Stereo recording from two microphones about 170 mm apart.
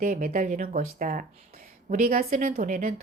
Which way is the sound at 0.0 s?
55° right (ahead or behind).